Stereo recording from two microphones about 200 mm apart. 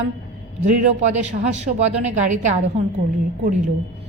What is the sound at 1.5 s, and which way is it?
A woman's voice, 35° right (ahead or behind).